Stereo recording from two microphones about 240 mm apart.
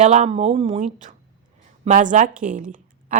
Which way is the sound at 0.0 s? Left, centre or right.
Right.